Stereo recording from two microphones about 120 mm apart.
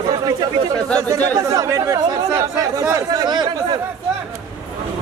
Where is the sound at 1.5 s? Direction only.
30° right (ahead or behind).